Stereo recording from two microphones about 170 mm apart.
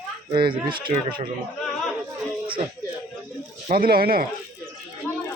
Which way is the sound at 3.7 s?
60° right (ahead or behind).